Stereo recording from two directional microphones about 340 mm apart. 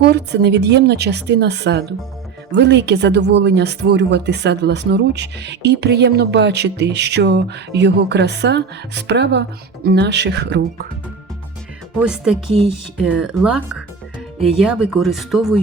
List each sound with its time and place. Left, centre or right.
0.0 s speech: right
11.9 s speech: centre